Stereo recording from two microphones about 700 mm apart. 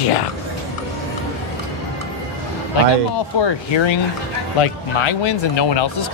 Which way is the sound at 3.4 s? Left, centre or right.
Left.